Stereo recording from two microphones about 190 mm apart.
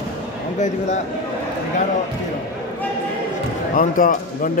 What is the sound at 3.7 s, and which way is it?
Speech, 45° left (ahead or behind).